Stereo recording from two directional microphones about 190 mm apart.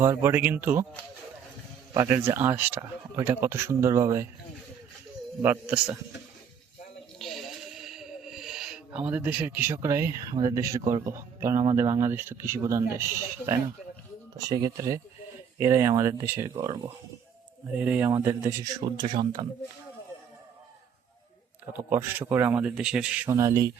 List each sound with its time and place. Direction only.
0.0 s speech: 15° right (ahead or behind)
1.9 s speech: 15° right (ahead or behind)
5.4 s speech: 10° right (ahead or behind)
7.2 s a sound: centre (ahead or behind); by 10.8 s 15° right (ahead or behind)
11.0 s speech: 15° right (ahead or behind)
21.7 s speech: 10° right (ahead or behind)